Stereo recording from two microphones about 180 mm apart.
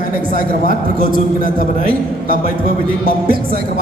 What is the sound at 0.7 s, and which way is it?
A man's voice, 55° right (ahead or behind).